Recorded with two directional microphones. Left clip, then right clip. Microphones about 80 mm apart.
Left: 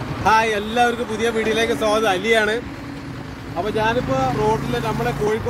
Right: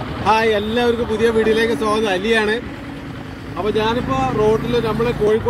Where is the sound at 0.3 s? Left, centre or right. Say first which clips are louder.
Right 2 dB; left.